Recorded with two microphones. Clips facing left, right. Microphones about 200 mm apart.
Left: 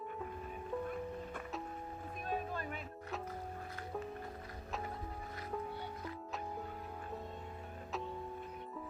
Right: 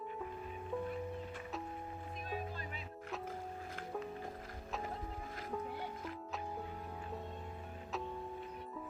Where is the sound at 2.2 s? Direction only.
50° left (ahead or behind).